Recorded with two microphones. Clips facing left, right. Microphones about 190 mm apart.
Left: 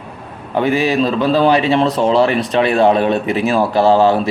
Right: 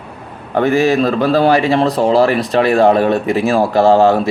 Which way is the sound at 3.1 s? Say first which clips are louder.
Right 2 dB; 40° right (ahead or behind).